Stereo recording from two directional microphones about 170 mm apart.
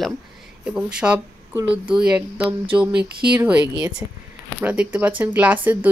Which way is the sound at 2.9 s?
75° right (ahead or behind).